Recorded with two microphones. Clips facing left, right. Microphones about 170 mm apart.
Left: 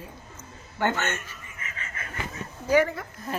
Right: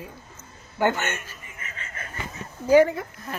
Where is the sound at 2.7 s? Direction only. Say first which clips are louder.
Right 5 dB; 25° right (ahead or behind).